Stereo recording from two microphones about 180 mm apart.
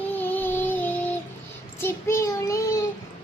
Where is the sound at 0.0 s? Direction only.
10° left (ahead or behind).